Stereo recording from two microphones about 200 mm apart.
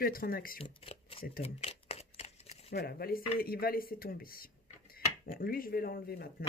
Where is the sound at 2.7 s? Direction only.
50° left (ahead or behind).